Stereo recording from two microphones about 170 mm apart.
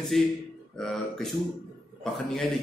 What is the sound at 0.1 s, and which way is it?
A man's voice, centre (ahead or behind).